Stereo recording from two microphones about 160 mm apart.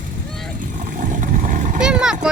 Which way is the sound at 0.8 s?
50° right (ahead or behind).